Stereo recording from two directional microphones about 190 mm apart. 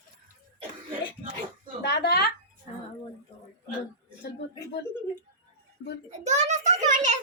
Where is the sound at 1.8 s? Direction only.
60° left (ahead or behind).